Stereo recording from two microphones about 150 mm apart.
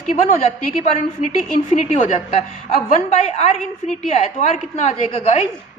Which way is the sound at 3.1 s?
45° left (ahead or behind).